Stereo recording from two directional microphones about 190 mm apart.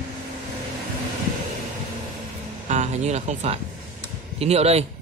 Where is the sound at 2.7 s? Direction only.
35° right (ahead or behind).